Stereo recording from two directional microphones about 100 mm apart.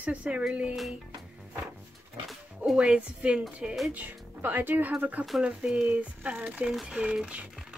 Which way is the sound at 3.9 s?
20° right (ahead or behind).